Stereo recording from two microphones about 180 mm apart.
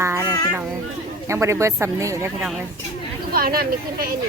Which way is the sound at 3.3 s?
55° right (ahead or behind).